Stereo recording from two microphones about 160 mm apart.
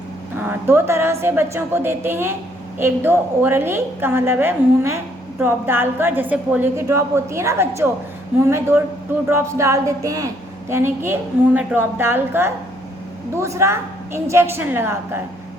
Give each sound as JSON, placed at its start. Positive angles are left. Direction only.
{"t": 0.3, "sound": "a woman's voice", "side_deg": -15}